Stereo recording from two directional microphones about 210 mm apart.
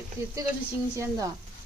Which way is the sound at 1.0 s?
15° right (ahead or behind).